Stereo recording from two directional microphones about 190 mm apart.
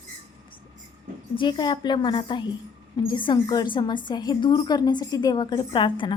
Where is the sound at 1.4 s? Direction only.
25° left (ahead or behind).